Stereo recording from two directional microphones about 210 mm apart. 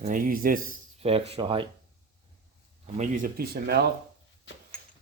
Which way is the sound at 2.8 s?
30° right (ahead or behind).